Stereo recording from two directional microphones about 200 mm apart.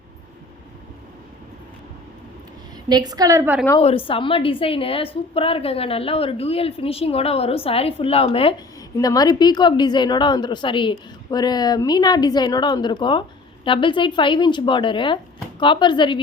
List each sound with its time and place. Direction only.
2.9 s a woman's voice: 20° right (ahead or behind)
3.8 s a woman's voice: 30° left (ahead or behind)